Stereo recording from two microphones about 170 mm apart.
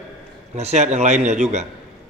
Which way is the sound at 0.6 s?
40° right (ahead or behind).